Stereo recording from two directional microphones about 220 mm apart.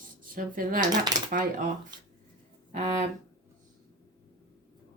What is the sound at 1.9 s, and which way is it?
Speech, 20° right (ahead or behind).